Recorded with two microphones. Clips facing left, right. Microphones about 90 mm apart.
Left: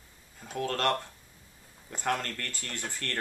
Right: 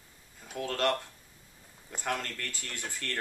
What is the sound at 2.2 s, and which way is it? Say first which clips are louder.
Speech: left 1 dB; 5° right (ahead or behind).